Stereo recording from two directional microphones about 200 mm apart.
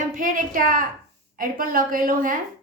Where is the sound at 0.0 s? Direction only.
45° right (ahead or behind).